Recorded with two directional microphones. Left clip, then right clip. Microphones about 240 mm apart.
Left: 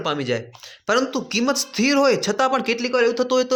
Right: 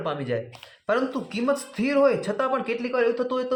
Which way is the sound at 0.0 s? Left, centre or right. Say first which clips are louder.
Left 4 dB; left.